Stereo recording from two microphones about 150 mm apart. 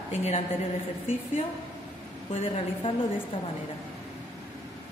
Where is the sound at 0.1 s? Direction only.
45° left (ahead or behind).